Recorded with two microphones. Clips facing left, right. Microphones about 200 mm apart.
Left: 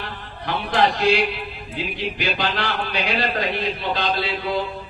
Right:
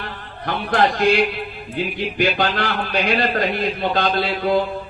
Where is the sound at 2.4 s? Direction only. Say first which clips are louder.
Right 3 dB; 45° right (ahead or behind).